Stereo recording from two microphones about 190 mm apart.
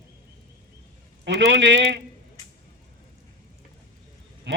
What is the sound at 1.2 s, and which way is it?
Speech, 70° right (ahead or behind).